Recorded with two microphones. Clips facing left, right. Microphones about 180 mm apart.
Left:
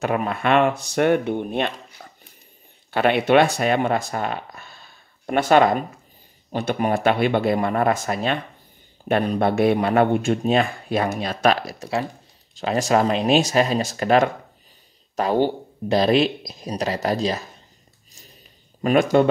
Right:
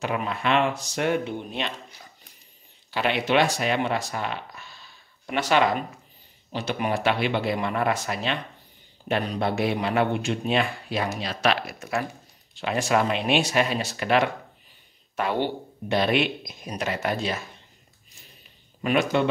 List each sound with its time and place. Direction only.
0.0 s a man's voice: 50° left (ahead or behind)
2.0 s a sound: 55° left (ahead or behind)
2.9 s a man's voice: 55° left (ahead or behind); by 17.5 s 35° left (ahead or behind)
18.8 s speech: 45° left (ahead or behind)